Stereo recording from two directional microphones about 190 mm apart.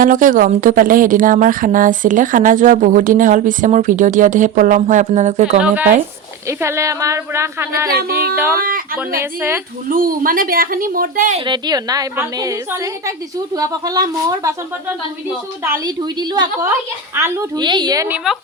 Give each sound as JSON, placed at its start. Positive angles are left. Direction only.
{"t": 0.0, "sound": "a woman's voice", "side_deg": -45}
{"t": 5.6, "sound": "speech", "side_deg": -10}
{"t": 7.9, "sound": "a woman's voice", "side_deg": -55}
{"t": 11.3, "sound": "a woman's voice", "side_deg": -25}
{"t": 17.2, "sound": "speech", "side_deg": -15}